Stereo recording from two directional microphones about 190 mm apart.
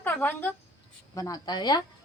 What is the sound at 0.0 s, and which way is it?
A woman's voice, 10° left (ahead or behind).